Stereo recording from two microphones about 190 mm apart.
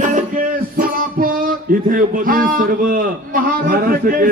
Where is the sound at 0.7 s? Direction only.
50° right (ahead or behind).